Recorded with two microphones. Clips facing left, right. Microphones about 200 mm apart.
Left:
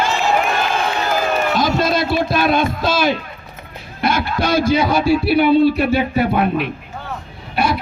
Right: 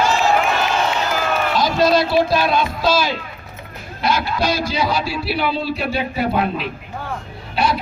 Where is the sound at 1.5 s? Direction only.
50° left (ahead or behind).